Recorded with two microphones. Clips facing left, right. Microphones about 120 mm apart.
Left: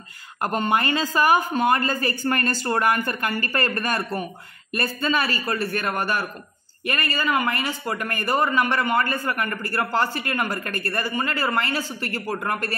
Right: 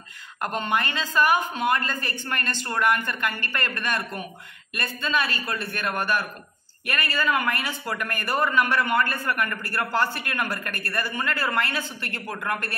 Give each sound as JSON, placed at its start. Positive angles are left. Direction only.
{"t": 0.4, "sound": "a man's voice", "side_deg": 45}